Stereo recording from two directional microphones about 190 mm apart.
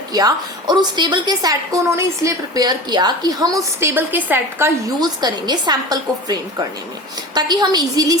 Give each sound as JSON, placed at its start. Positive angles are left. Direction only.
{"t": 0.1, "sound": "a woman's voice", "side_deg": -20}
{"t": 4.9, "sound": "a woman's voice", "side_deg": -20}